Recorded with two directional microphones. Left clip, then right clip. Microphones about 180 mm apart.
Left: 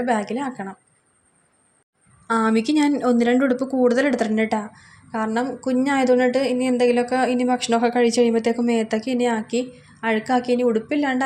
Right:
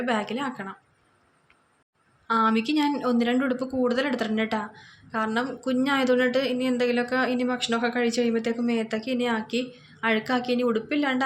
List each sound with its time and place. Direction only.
0.0 s speech: 25° left (ahead or behind)
2.2 s speech: 35° left (ahead or behind)